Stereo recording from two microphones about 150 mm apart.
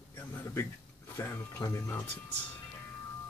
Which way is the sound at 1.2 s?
20° left (ahead or behind).